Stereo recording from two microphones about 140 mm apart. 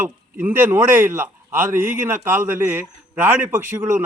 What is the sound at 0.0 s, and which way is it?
A man's voice, 15° right (ahead or behind).